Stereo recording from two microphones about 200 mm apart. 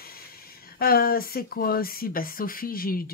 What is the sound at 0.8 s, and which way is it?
Speech, 50° left (ahead or behind).